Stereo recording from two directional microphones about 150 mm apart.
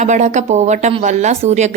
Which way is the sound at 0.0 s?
50° right (ahead or behind).